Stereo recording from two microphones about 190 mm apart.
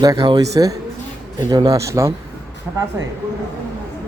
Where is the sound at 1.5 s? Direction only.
20° right (ahead or behind).